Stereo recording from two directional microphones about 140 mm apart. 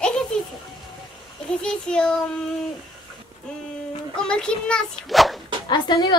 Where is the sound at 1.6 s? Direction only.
5° left (ahead or behind).